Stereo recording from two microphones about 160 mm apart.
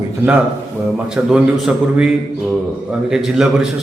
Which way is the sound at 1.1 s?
Centre (ahead or behind).